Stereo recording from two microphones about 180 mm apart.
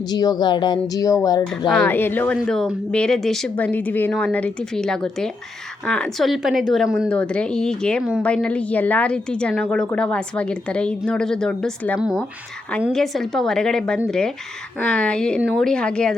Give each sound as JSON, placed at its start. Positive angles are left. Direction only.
{"t": 0.1, "sound": "speech", "side_deg": 20}
{"t": 1.7, "sound": "a woman's voice", "side_deg": 10}
{"t": 11.9, "sound": "a woman's voice", "side_deg": -5}